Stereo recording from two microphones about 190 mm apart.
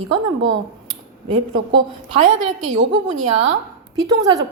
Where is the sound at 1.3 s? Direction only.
25° right (ahead or behind).